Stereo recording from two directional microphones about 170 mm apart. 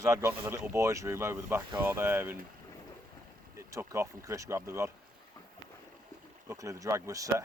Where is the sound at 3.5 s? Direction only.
15° right (ahead or behind).